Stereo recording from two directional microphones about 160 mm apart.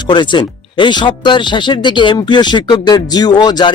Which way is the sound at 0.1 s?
30° left (ahead or behind).